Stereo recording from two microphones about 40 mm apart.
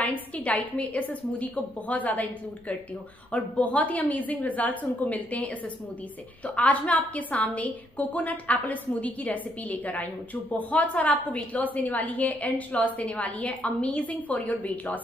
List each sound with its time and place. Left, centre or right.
0.0 s a woman's voice: left
3.3 s a woman's voice: left